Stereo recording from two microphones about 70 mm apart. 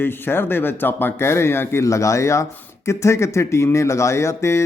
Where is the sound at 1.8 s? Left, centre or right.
Left.